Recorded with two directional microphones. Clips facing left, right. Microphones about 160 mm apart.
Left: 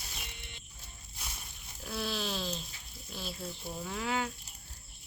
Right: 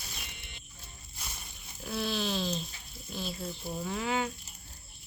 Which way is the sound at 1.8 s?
Centre (ahead or behind).